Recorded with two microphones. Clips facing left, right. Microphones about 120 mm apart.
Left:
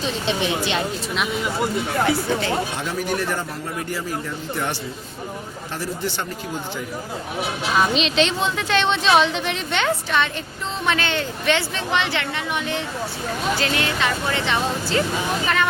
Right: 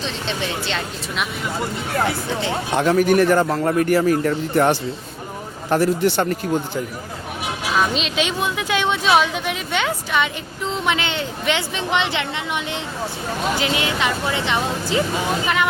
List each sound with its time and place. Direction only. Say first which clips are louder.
0.3 s speech: left 3 dB; 15° left (ahead or behind)
2.7 s a man's voice: right 9 dB; 60° right (ahead or behind)
7.8 s a woman's voice: left 2 dB; centre (ahead or behind); by 12.2 s 20° right (ahead or behind)
13.6 s a woman's voice: right 1 dB; 15° right (ahead or behind)